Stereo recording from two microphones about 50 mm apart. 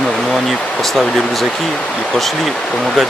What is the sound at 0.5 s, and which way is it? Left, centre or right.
Speech, centre.